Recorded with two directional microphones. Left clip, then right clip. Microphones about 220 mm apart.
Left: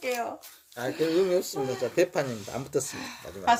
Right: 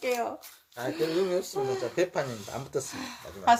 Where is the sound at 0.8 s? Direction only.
40° left (ahead or behind).